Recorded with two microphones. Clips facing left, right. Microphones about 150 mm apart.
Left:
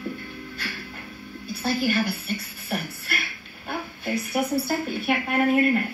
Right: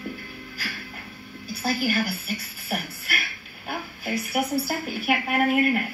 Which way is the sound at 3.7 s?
5° right (ahead or behind).